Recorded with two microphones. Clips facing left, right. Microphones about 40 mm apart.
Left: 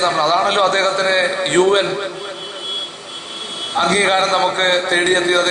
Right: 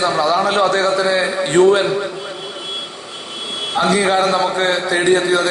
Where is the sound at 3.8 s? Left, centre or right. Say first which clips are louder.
Even; left.